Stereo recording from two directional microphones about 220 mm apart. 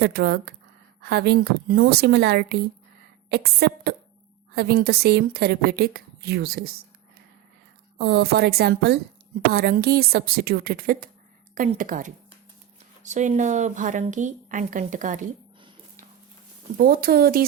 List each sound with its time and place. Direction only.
0.0 s a woman's voice: 45° right (ahead or behind)
7.9 s a woman's voice: 50° right (ahead or behind)
16.7 s a woman's voice: 40° right (ahead or behind)